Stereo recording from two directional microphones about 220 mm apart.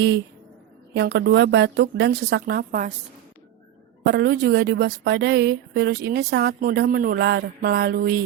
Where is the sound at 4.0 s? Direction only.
45° right (ahead or behind).